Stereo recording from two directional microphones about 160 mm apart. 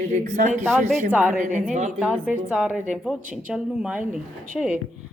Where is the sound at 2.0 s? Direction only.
10° right (ahead or behind).